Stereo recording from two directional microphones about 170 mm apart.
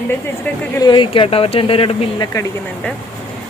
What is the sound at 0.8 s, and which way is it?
Speech, 25° left (ahead or behind).